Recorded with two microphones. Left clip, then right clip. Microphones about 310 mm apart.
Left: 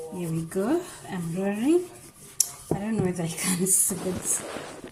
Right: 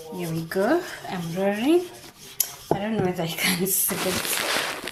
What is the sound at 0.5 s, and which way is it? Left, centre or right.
Speech, right.